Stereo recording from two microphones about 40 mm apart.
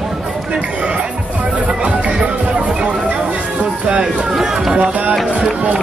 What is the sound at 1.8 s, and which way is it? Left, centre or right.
Music, right.